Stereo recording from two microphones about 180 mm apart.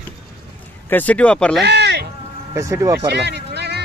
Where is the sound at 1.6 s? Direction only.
70° right (ahead or behind).